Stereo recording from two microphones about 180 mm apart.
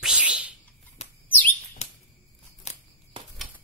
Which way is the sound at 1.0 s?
35° left (ahead or behind).